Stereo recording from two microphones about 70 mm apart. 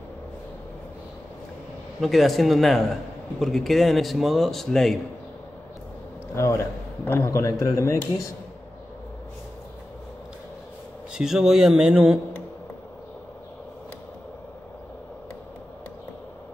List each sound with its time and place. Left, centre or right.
2.0 s a man's voice: centre
6.3 s speech: left
11.1 s a man's voice: centre